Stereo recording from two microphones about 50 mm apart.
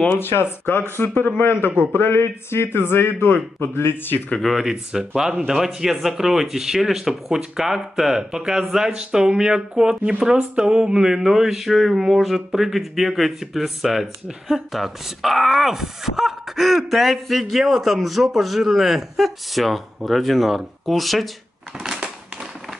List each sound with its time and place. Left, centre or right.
0.2 s a man's voice: left
1.7 s a man's voice: right
2.0 s a man's voice: left
4.4 s speech: centre